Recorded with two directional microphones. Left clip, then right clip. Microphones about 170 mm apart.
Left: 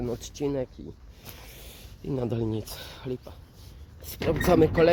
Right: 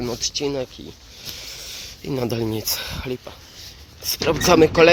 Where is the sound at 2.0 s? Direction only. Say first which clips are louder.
Right 6 dB; 5° right (ahead or behind).